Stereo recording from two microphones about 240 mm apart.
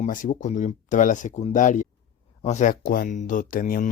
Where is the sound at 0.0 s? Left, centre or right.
Left.